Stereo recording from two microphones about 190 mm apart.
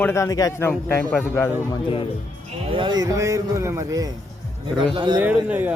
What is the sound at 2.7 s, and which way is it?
A man's voice, 25° right (ahead or behind).